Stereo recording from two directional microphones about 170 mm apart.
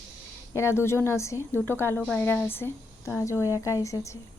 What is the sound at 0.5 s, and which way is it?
Speech, 15° left (ahead or behind).